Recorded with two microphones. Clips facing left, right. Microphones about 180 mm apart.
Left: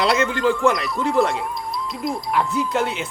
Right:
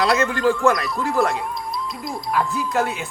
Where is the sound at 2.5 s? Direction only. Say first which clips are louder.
Left 1 dB; 25° left (ahead or behind).